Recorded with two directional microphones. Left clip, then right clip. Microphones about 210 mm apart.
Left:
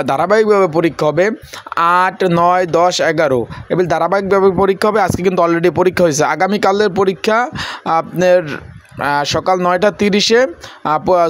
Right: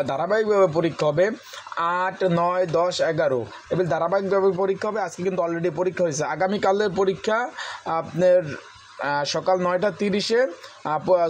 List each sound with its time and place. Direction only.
0.0 s speech: 30° left (ahead or behind)